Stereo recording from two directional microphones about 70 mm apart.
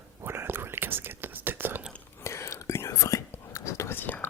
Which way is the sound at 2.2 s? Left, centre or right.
Left.